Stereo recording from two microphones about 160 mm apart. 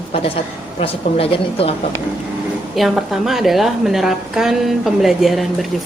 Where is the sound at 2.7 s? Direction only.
Centre (ahead or behind).